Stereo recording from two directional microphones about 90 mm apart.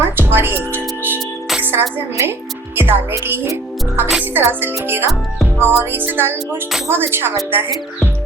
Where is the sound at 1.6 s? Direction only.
20° right (ahead or behind).